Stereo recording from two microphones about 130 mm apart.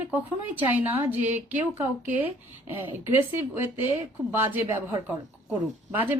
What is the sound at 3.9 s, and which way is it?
Speech, 15° right (ahead or behind).